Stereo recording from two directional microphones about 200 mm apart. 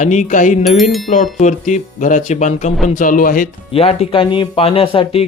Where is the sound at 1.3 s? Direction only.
35° left (ahead or behind).